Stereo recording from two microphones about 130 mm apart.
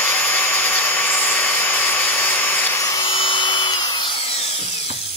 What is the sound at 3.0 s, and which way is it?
Tools, 40° left (ahead or behind).